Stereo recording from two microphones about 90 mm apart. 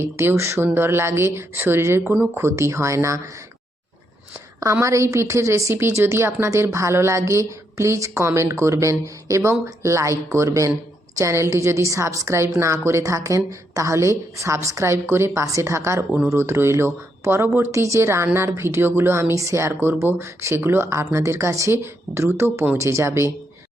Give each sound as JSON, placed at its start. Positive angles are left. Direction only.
{"t": 0.0, "sound": "a woman's voice", "side_deg": -30}
{"t": 4.6, "sound": "a woman's voice", "side_deg": -35}